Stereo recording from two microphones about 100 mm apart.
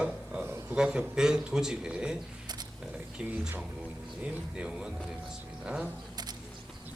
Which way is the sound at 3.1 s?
10° right (ahead or behind).